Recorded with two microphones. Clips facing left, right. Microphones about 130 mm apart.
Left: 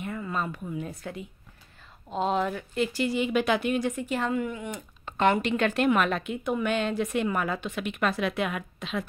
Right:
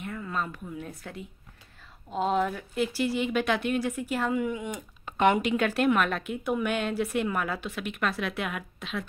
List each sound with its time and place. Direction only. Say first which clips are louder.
0.0 s speech: left 2 dB; 5° left (ahead or behind)